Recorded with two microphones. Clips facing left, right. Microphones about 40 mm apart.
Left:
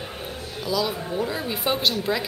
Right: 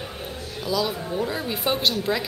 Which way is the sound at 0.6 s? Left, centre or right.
Centre.